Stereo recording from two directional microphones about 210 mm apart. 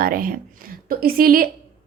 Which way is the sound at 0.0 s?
40° right (ahead or behind).